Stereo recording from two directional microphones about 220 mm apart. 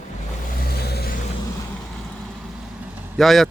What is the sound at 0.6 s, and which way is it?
Vehicle, 45° left (ahead or behind).